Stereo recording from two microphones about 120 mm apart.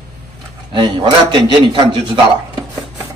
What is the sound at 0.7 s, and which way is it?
A man's voice, 40° right (ahead or behind).